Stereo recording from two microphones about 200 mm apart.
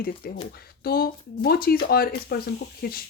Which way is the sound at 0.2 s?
50° left (ahead or behind).